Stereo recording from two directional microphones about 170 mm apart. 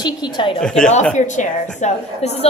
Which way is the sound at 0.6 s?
5° left (ahead or behind).